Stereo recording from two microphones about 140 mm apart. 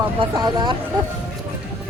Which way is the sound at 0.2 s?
30° right (ahead or behind).